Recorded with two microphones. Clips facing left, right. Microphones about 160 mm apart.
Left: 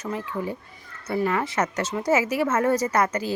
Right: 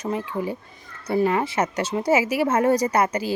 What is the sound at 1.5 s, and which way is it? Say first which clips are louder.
Speech: right 2 dB; 10° right (ahead or behind).